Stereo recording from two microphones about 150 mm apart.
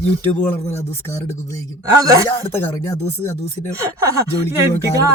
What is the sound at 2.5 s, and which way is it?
Speech, 15° left (ahead or behind).